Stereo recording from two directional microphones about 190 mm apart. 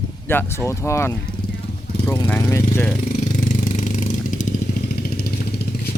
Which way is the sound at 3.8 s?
40° left (ahead or behind).